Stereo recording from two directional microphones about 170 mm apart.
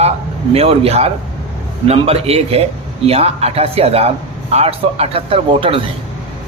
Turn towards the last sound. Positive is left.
turn(degrees=-35)  # may be behind; listen again after turning